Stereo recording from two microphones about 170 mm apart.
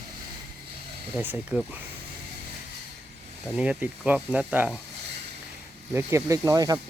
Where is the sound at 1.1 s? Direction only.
10° right (ahead or behind).